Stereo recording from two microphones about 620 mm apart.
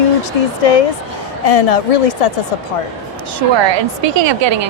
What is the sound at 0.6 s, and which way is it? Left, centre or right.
A woman's voice, left.